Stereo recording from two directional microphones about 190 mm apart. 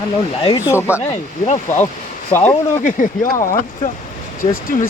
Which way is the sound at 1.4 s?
35° left (ahead or behind).